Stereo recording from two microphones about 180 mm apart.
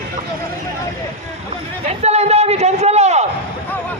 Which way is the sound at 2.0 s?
35° right (ahead or behind).